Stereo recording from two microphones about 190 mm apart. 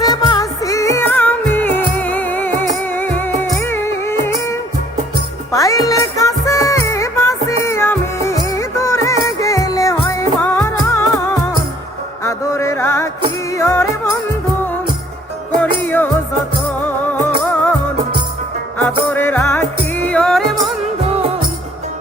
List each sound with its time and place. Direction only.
0.0 s music: 20° left (ahead or behind)
12.2 s music: 15° left (ahead or behind)
15.6 s music: 10° left (ahead or behind)
17.5 s music: 10° left (ahead or behind)
18.8 s music: 10° left (ahead or behind)